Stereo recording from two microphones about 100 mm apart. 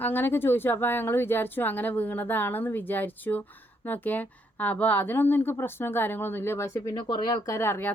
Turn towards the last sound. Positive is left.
turn(degrees=25)  # may be behind; listen again after turning